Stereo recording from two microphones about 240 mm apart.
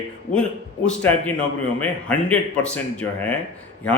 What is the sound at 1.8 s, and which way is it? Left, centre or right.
A man's voice, centre.